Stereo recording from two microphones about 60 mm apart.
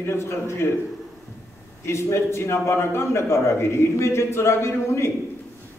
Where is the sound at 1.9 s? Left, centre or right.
Left.